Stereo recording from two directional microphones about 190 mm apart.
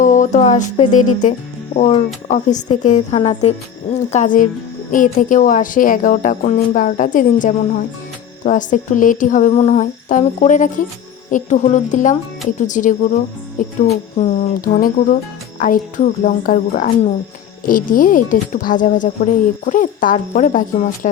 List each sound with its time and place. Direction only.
0.0 s speech: 40° left (ahead or behind)